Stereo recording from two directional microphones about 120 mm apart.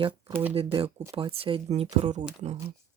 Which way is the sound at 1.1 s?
45° right (ahead or behind).